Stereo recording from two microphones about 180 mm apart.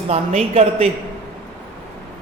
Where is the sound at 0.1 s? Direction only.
35° right (ahead or behind).